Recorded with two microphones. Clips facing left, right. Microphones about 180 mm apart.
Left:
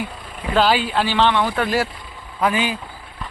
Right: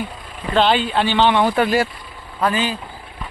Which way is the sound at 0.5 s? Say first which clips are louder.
Right 1 dB; 5° left (ahead or behind).